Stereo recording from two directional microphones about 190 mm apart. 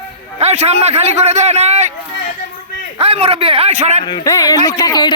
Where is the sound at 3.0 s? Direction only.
30° right (ahead or behind).